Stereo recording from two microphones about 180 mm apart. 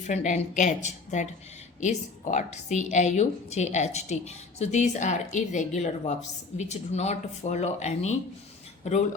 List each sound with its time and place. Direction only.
0.0 s a woman's voice: 40° left (ahead or behind)